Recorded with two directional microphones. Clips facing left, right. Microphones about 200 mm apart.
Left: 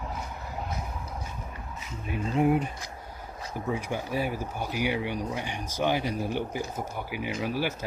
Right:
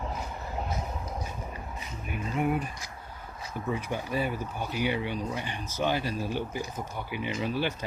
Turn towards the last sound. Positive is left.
turn(degrees=10)  # may be behind; listen again after turning